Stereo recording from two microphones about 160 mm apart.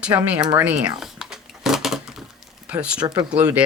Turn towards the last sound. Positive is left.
turn(degrees=-5)  # may be behind; listen again after turning